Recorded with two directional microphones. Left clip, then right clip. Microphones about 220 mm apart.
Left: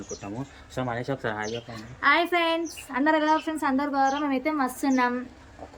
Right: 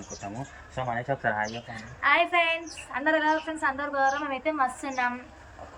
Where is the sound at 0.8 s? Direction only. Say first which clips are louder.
Even; 15° left (ahead or behind).